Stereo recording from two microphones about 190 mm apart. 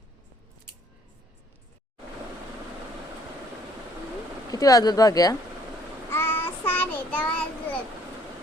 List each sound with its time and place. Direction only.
4.5 s speech: 20° left (ahead or behind)
6.1 s child singing: 10° left (ahead or behind)